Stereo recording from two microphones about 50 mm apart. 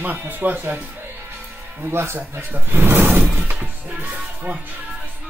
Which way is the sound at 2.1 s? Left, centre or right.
Right.